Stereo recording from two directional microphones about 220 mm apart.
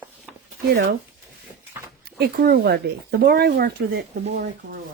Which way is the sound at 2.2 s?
50° right (ahead or behind).